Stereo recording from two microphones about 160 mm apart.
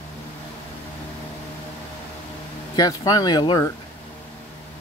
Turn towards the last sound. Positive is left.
turn(degrees=25)  # may be behind; listen again after turning